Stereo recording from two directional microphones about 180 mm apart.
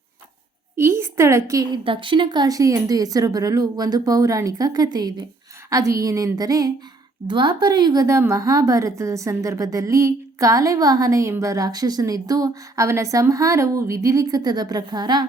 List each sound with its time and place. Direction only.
0.8 s a woman's voice: 15° right (ahead or behind)